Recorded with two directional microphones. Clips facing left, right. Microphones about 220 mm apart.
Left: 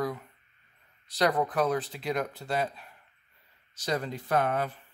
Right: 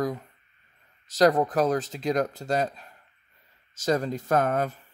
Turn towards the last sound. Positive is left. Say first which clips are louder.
# right 4 dB
turn(degrees=-45)  # may be behind; listen again after turning